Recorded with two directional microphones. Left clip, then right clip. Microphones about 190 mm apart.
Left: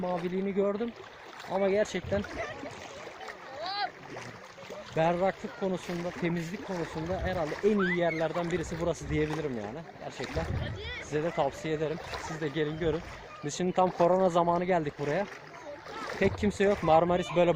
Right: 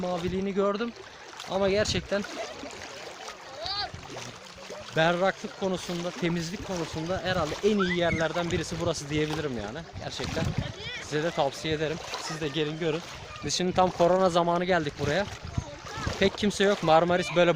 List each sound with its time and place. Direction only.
0.0 s speech: 20° right (ahead or behind)
4.9 s speech: 20° right (ahead or behind)
11.1 s speech: 20° right (ahead or behind)